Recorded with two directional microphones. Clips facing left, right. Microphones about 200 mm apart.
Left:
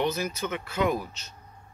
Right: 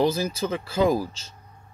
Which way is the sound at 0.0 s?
30° right (ahead or behind).